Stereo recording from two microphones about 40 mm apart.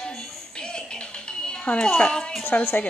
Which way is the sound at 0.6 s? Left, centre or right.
Left.